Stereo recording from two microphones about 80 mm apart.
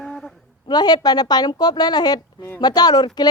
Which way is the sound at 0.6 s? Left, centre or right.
Left.